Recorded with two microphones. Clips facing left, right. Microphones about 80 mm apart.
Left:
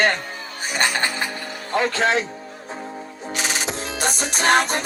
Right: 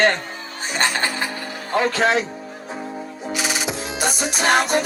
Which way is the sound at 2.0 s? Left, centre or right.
Right.